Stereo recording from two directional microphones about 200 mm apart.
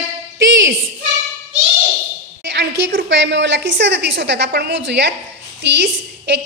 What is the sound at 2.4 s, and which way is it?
A woman's voice, 60° right (ahead or behind).